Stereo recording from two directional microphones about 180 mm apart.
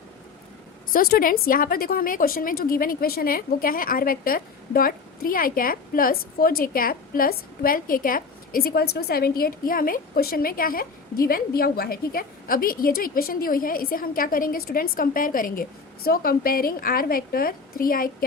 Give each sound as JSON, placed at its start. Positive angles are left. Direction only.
{"t": 0.9, "sound": "a woman's voice", "side_deg": 55}